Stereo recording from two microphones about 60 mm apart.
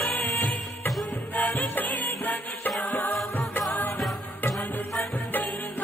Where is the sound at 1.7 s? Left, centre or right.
Left.